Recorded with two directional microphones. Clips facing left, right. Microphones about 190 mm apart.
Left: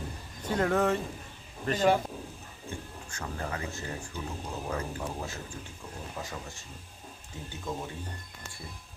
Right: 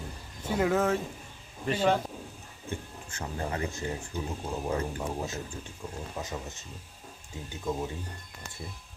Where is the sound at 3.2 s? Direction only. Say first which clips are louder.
Right 3 dB; 25° right (ahead or behind).